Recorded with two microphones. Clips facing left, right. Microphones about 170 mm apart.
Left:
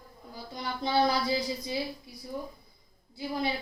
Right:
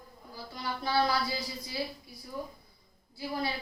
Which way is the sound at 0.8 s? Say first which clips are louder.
Left 3 dB; 20° left (ahead or behind).